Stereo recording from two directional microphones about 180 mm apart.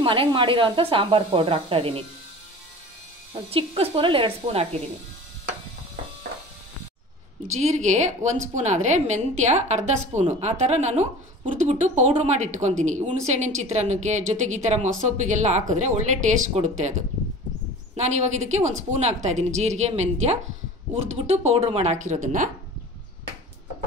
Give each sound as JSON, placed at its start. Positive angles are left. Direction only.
{"t": 0.0, "sound": "speech", "side_deg": -30}
{"t": 3.4, "sound": "a woman's voice", "side_deg": -30}
{"t": 7.5, "sound": "a woman's voice", "side_deg": -40}
{"t": 17.9, "sound": "a woman's voice", "side_deg": -40}